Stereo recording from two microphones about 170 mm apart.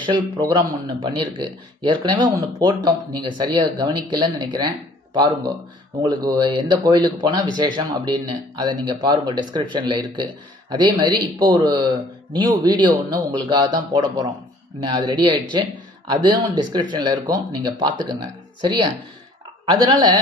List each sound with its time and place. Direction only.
0.0 s speech: 25° right (ahead or behind)